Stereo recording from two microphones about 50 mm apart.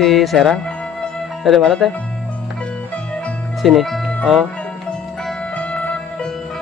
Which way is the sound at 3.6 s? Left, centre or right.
Centre.